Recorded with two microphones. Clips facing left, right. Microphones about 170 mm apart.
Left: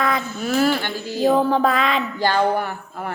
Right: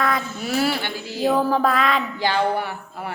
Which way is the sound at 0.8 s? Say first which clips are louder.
Left 3 dB; 45° left (ahead or behind).